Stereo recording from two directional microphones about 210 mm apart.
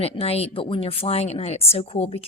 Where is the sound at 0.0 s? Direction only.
30° left (ahead or behind).